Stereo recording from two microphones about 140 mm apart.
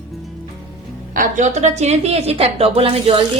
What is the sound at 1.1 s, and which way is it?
A woman's voice, 65° right (ahead or behind).